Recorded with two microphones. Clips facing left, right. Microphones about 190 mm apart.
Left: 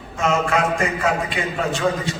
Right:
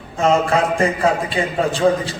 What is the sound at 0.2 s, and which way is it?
A man's voice, 30° right (ahead or behind).